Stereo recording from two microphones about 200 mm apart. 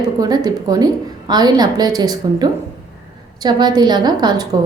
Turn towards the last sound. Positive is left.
turn(degrees=-20)  # may be behind; listen again after turning